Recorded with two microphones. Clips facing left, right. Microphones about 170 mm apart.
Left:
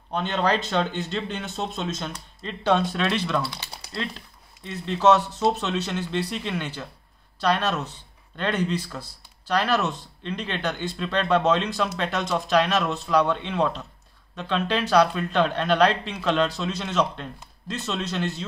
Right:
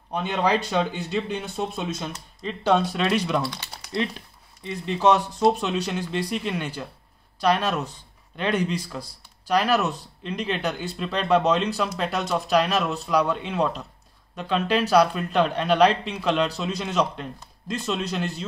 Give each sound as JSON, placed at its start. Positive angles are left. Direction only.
{"t": 0.1, "sound": "speech", "side_deg": -10}